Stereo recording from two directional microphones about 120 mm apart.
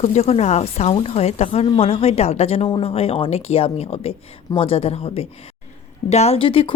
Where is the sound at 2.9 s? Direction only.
55° left (ahead or behind).